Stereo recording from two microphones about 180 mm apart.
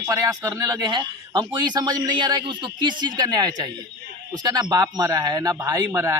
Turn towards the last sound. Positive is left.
turn(degrees=-15)  # may be behind; listen again after turning